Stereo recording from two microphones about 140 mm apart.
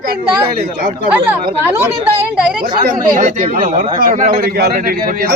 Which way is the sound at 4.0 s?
80° right.